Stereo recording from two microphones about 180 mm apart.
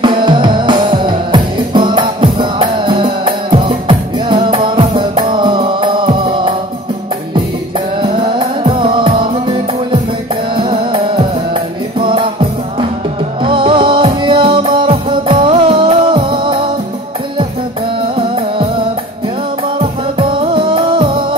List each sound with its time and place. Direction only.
0.0 s music: 25° right (ahead or behind)
8.0 s music: 25° right (ahead or behind)
19.8 s music: 30° right (ahead or behind)